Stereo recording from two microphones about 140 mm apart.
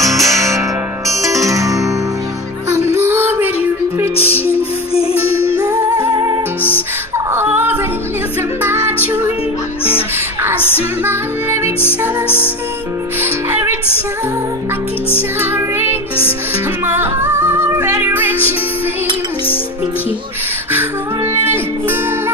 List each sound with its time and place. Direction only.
0.0 s music: centre (ahead or behind)
0.4 s music: 20° right (ahead or behind)
3.0 s music: 15° right (ahead or behind)
4.6 s music: 45° left (ahead or behind)
5.6 s music: 25° right (ahead or behind)
7.2 s female singing: 15° right (ahead or behind)
8.6 s music: 15° right (ahead or behind)
11.1 s music: 15° right (ahead or behind)
13.2 s music: 15° right (ahead or behind)
15.5 s music: 15° right (ahead or behind)
21.4 s music: 15° right (ahead or behind)